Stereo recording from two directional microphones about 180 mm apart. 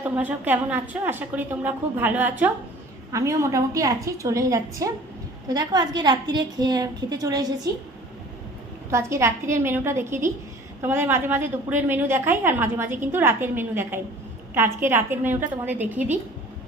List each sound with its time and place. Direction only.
0.0 s a woman's voice: 10° right (ahead or behind)
8.9 s a woman's voice: 15° right (ahead or behind)